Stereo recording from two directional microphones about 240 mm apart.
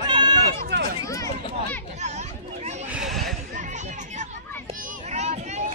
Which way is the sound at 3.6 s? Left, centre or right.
Right.